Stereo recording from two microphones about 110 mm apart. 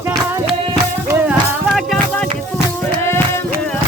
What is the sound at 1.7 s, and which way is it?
Music, 5° left (ahead or behind).